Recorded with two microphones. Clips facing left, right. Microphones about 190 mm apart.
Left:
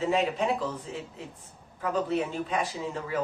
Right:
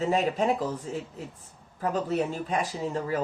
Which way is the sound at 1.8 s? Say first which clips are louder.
Right 1 dB; 40° right (ahead or behind).